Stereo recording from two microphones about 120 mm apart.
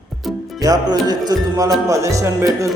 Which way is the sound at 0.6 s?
30° right (ahead or behind).